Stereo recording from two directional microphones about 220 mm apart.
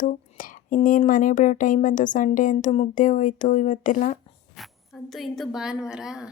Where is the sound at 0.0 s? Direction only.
40° left (ahead or behind).